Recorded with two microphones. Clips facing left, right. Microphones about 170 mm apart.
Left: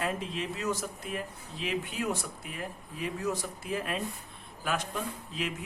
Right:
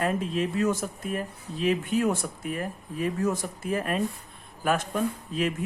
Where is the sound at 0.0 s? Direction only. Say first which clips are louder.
Right 7 dB; 50° right (ahead or behind).